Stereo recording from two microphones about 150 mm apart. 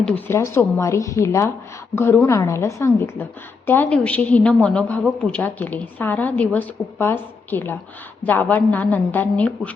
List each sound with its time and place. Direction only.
0.0 s a woman's voice: 10° left (ahead or behind)